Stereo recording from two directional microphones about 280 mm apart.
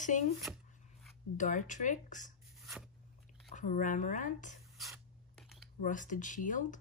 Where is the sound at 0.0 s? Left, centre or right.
Left.